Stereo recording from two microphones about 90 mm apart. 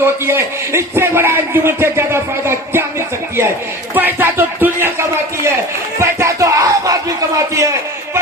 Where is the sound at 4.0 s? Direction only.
20° right (ahead or behind).